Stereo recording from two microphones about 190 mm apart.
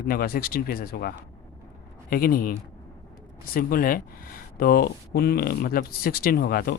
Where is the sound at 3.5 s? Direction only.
50° left (ahead or behind).